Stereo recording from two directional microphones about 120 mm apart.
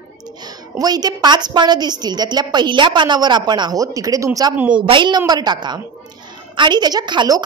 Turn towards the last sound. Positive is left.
turn(degrees=-35)  # may be behind; listen again after turning